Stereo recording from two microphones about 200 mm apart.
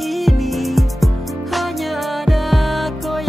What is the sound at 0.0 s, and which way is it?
Music, centre (ahead or behind).